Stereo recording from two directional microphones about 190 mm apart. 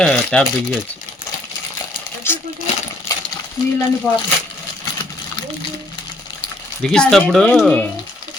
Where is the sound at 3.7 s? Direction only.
10° left (ahead or behind).